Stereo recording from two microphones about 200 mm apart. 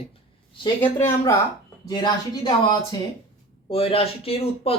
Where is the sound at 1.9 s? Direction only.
20° left (ahead or behind).